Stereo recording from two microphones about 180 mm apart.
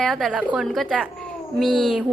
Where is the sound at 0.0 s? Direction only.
Centre (ahead or behind).